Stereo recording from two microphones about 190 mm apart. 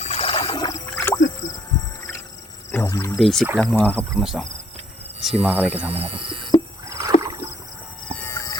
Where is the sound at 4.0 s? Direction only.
Centre (ahead or behind).